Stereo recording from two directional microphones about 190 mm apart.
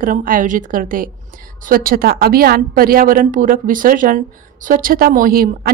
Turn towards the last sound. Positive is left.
turn(degrees=-50)  # may be behind; listen again after turning